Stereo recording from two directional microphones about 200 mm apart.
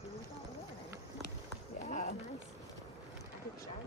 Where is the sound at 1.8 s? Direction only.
35° left (ahead or behind).